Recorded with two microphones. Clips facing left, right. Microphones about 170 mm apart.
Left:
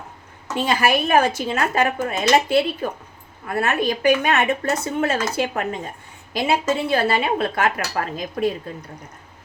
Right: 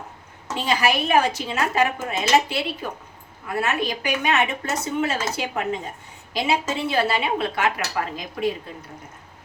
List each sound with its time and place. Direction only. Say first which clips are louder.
0.6 s speech: left 2 dB; 50° left (ahead or behind)